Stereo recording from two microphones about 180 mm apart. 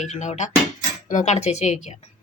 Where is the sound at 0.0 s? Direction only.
40° left (ahead or behind).